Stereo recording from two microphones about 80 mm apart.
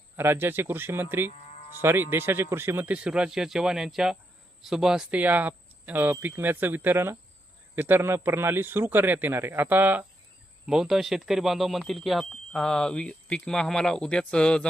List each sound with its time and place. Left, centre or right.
0.2 s a man's voice: right; by 5.2 s centre
5.2 s a man's voice: right
10.7 s speech: centre